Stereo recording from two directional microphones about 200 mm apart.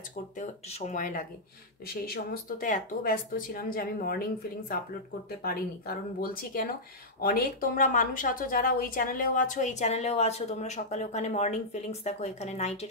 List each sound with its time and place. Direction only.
0.4 s a woman's voice: 35° left (ahead or behind)